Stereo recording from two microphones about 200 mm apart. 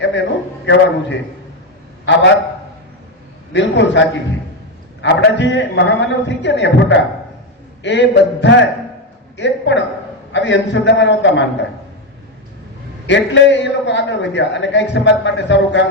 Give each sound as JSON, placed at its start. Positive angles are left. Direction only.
{"t": 0.0, "sound": "a man's voice", "side_deg": 65}
{"t": 3.5, "sound": "a man's voice", "side_deg": 65}
{"t": 13.1, "sound": "a man's voice", "side_deg": 60}